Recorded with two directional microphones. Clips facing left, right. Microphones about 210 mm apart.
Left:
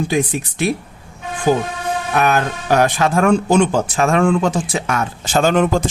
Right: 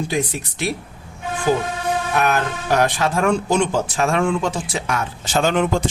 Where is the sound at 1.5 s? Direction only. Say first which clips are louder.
Left 3 dB; 55° left (ahead or behind).